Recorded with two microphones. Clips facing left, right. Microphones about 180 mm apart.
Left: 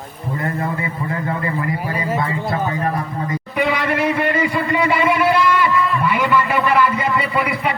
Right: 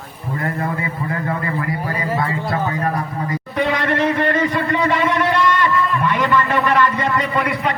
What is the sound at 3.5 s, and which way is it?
Speech, 10° left (ahead or behind).